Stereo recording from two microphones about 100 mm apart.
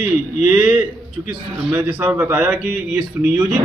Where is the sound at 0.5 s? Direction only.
20° right (ahead or behind).